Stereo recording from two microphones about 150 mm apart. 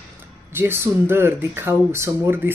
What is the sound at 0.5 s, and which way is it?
Speech, 15° right (ahead or behind).